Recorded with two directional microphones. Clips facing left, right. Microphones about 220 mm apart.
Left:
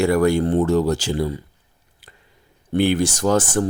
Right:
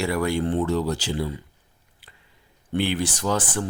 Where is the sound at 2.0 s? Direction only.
45° left (ahead or behind).